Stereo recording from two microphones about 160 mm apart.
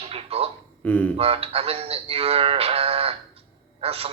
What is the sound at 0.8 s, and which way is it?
Speech, 10° left (ahead or behind).